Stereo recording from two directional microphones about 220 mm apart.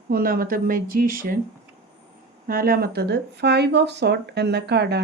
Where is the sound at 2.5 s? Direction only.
40° right (ahead or behind).